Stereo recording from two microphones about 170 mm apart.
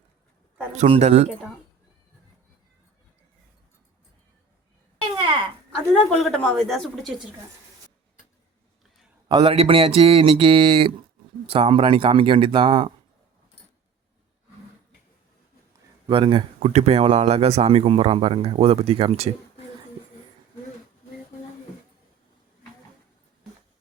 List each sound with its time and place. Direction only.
0.8 s speech: 40° right (ahead or behind)
5.9 s speech: centre (ahead or behind)
9.3 s speech: 30° right (ahead or behind)
16.0 s speech: 30° right (ahead or behind)